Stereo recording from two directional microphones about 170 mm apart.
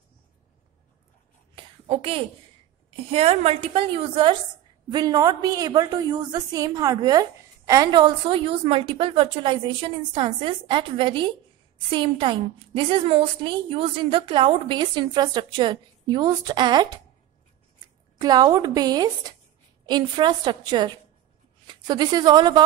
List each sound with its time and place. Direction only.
1.5 s a sound: 30° right (ahead or behind)
3.1 s a woman's voice: 35° right (ahead or behind)
18.2 s a woman's voice: 25° right (ahead or behind)